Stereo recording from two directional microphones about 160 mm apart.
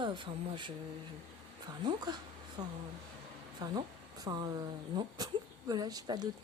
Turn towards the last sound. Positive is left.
turn(degrees=-25)  # may be behind; listen again after turning